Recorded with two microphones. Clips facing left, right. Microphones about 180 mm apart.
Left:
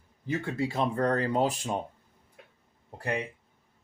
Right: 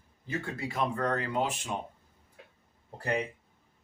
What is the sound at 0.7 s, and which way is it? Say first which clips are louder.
Speech: left 2 dB; 30° left (ahead or behind).